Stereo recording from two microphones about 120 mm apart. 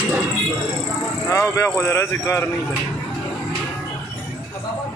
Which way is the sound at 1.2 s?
25° left (ahead or behind).